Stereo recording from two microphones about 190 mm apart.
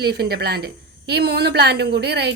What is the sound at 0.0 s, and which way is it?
A woman's voice, 60° right (ahead or behind).